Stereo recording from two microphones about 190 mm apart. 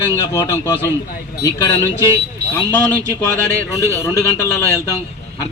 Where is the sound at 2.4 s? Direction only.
55° right (ahead or behind).